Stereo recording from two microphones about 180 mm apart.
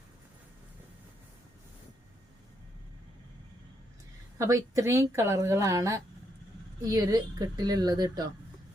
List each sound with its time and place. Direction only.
4.4 s a woman's voice: 20° right (ahead or behind)